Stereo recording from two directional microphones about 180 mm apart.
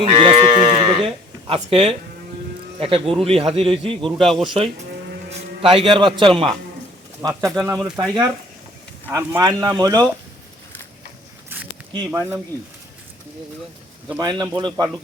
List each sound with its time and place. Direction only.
0.0 s sheep: 30° right (ahead or behind)
2.8 s speech: 30° right (ahead or behind)
4.2 s speech: centre (ahead or behind)
5.7 s speech: 25° right (ahead or behind); by 7.9 s 10° right (ahead or behind)
7.9 s speech: 20° right (ahead or behind)
11.4 s a sound: 10° right (ahead or behind)
12.1 s speech: 10° right (ahead or behind)
14.2 s speech: 25° right (ahead or behind)